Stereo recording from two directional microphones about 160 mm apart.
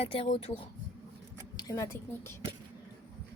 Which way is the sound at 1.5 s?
20° left (ahead or behind).